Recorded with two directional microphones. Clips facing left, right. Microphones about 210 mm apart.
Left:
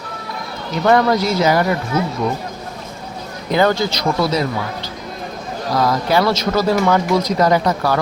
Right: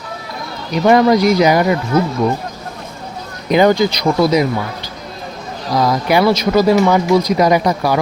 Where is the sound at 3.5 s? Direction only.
15° right (ahead or behind).